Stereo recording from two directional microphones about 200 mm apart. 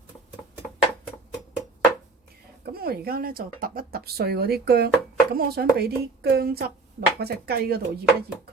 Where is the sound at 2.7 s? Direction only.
50° right (ahead or behind).